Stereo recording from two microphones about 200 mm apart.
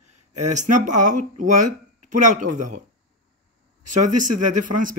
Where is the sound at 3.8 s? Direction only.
40° right (ahead or behind).